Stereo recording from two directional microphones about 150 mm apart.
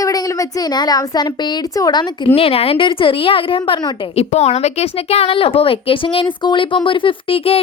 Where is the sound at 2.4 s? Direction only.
40° left (ahead or behind).